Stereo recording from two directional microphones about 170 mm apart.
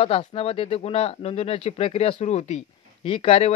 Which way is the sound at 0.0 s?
35° left (ahead or behind).